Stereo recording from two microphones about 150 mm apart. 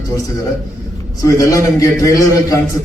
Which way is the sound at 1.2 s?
20° left (ahead or behind).